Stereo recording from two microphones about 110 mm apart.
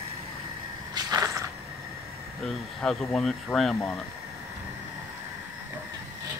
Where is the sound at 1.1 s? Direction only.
30° right (ahead or behind).